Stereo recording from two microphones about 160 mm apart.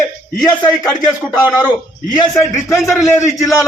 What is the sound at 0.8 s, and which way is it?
Speech, 5° left (ahead or behind).